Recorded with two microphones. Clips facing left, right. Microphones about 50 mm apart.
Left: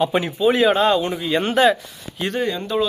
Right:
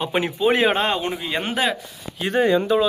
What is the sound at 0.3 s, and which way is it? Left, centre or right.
Speech, right.